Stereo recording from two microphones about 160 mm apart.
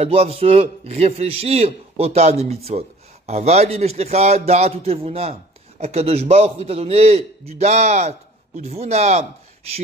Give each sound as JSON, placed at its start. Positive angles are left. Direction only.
{"t": 0.0, "sound": "a man's voice", "side_deg": -40}